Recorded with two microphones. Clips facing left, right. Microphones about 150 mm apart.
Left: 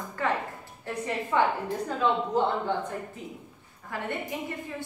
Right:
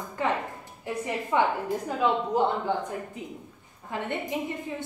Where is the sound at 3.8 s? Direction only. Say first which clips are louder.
Right 2 dB; 20° right (ahead or behind).